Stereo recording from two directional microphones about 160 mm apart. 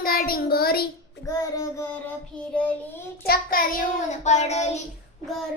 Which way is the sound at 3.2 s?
70° left (ahead or behind).